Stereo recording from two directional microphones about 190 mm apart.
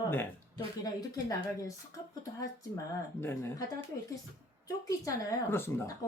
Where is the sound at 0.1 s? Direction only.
10° left (ahead or behind).